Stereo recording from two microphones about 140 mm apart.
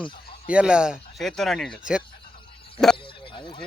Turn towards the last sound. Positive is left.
turn(degrees=35)  # may be behind; listen again after turning